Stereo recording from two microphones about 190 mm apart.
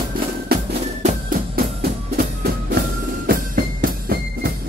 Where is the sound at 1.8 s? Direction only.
55° right (ahead or behind).